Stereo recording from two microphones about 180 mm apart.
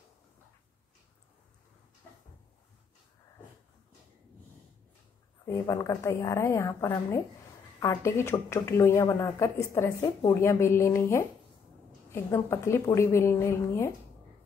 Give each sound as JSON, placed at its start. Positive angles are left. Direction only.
{"t": 5.4, "sound": "a woman's voice", "side_deg": 15}